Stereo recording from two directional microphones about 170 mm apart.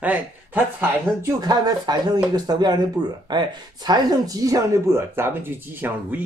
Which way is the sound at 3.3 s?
25° right (ahead or behind).